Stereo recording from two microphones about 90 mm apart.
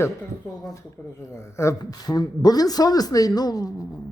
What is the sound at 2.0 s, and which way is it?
A woman's voice, 45° left (ahead or behind).